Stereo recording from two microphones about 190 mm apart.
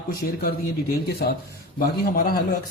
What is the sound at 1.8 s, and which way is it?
Speech, 50° left (ahead or behind).